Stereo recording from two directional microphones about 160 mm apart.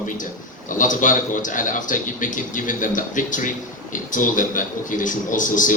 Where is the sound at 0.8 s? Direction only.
55° left (ahead or behind).